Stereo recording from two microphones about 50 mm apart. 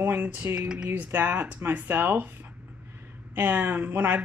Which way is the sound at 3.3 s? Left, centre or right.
Right.